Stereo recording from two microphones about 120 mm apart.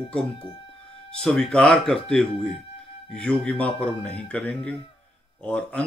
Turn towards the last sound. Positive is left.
turn(degrees=10)  # may be behind; listen again after turning